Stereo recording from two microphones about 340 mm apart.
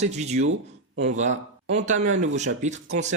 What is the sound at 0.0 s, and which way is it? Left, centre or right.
Speech, centre.